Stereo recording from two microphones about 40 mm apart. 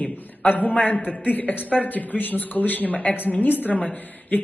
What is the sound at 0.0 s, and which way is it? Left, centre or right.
A man's voice, left.